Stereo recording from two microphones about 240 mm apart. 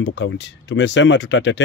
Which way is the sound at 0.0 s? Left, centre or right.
Left.